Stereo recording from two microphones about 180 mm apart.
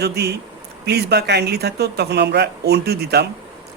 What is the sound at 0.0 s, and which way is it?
A man's voice, 65° right (ahead or behind).